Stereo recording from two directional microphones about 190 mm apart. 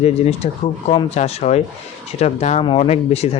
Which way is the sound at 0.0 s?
30° left (ahead or behind).